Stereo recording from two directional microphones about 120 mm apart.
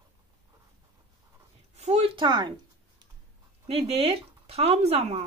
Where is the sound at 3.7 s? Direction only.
60° right (ahead or behind).